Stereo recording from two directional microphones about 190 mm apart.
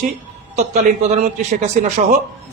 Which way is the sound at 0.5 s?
35° right (ahead or behind).